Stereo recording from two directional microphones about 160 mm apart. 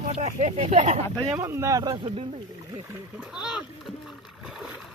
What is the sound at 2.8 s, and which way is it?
Speech, 15° right (ahead or behind).